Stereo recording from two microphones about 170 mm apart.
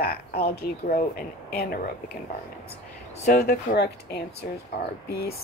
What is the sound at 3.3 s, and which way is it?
Speech, 70° left (ahead or behind).